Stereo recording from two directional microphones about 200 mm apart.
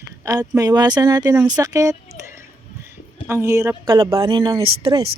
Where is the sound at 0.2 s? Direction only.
15° right (ahead or behind).